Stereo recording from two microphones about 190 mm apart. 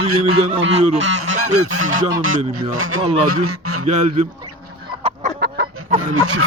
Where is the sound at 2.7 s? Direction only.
90° right.